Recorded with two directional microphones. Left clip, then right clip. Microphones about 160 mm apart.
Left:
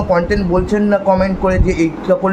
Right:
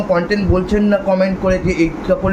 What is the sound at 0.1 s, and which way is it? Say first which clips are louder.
A man's voice: left 2 dB; 25° left (ahead or behind).